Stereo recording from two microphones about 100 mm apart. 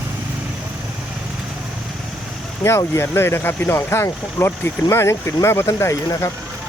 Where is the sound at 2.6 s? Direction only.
25° left (ahead or behind).